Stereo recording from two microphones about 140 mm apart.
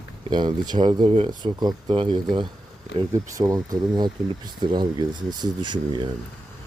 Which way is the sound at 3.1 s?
25° right (ahead or behind).